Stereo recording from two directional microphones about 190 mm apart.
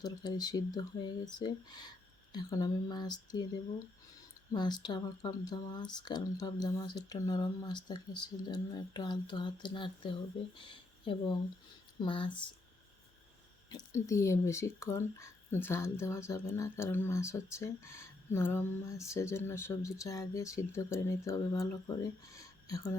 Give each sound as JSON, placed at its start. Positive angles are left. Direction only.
{"t": 0.0, "sound": "speech", "side_deg": 20}
{"t": 10.6, "sound": "a sound", "side_deg": 25}
{"t": 11.9, "sound": "speech", "side_deg": 25}
{"t": 13.7, "sound": "speech", "side_deg": 20}